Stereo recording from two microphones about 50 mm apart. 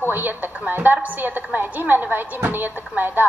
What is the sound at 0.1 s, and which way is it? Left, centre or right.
A woman's voice, right.